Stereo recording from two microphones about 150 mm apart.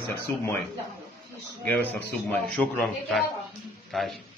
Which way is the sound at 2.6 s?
Centre (ahead or behind).